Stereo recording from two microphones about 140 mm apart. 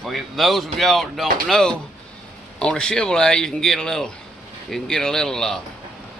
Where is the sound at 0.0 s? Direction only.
Centre (ahead or behind).